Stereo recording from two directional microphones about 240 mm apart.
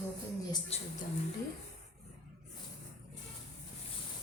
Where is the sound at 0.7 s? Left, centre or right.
Left.